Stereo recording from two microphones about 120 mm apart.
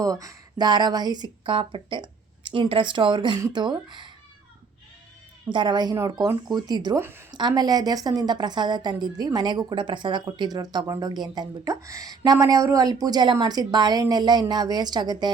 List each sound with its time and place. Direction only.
0.0 s a woman's voice: 30° right (ahead or behind)
5.5 s a woman's voice: 40° right (ahead or behind)
7.0 s a woman's voice: 20° right (ahead or behind)
7.3 s a woman's voice: 35° right (ahead or behind)